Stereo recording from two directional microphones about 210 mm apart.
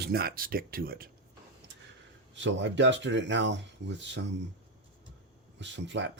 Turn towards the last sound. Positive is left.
turn(degrees=-60)  # may be behind; listen again after turning